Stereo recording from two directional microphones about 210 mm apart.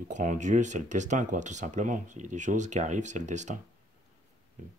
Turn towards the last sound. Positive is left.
turn(degrees=-35)  # may be behind; listen again after turning